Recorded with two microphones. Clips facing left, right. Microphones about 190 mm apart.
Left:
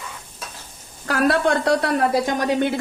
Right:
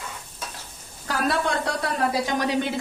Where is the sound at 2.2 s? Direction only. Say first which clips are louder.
Left 4 dB; 50° left (ahead or behind).